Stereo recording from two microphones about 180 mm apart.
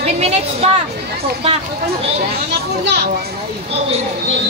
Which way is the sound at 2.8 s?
65° right (ahead or behind).